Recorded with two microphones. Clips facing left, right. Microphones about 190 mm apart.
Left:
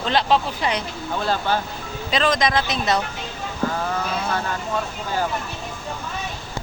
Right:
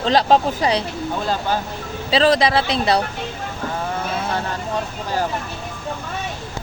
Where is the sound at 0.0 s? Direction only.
40° right (ahead or behind).